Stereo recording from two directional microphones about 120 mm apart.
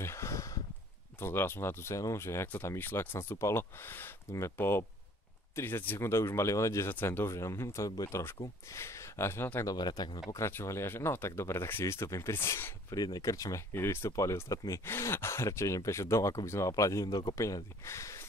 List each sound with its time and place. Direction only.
0.0 s a sound: 25° left (ahead or behind)
1.2 s speech: 20° left (ahead or behind)
9.7 s speech: 35° left (ahead or behind)
10.3 s speech: 25° left (ahead or behind)
12.9 s speech: 30° left (ahead or behind)